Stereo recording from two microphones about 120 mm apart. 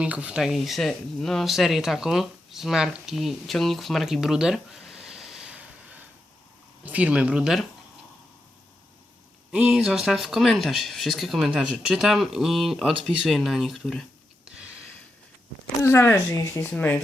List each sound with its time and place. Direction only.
0.0 s speech: 10° right (ahead or behind)
9.5 s speech: 10° right (ahead or behind)
15.8 s speech: 20° left (ahead or behind)
16.6 s speech: 15° left (ahead or behind)